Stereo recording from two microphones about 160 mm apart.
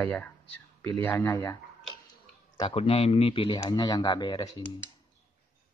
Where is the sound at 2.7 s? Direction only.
40° left (ahead or behind).